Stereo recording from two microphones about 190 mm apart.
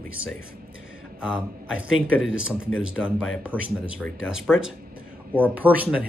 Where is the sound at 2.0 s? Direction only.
90° left.